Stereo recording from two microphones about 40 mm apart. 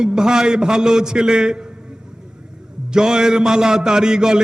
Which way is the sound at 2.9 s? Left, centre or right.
Centre.